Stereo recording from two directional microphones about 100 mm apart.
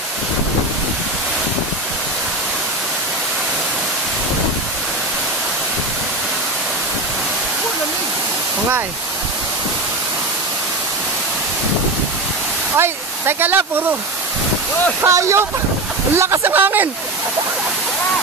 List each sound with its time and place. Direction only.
12.7 s speech: 25° right (ahead or behind)
15.0 s speech: 30° right (ahead or behind)